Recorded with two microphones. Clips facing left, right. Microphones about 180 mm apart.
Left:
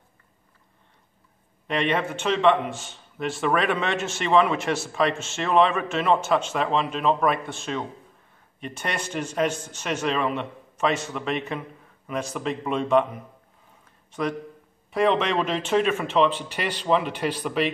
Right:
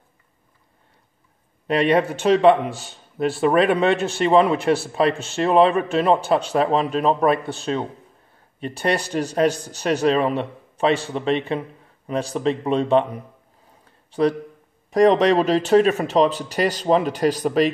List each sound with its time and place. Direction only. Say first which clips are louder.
1.7 s a man's voice: right 7 dB; 40° right (ahead or behind)
8.5 s a man's voice: right 8 dB; 35° right (ahead or behind)
13.8 s a sound: right 8 dB; 35° right (ahead or behind)
14.9 s a man's voice: right 7 dB; 40° right (ahead or behind)